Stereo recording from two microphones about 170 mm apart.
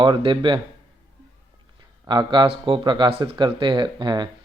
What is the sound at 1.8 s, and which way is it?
Speech, 25° right (ahead or behind).